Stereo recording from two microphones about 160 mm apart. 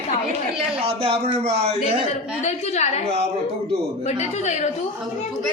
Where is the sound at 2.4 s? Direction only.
45° left (ahead or behind).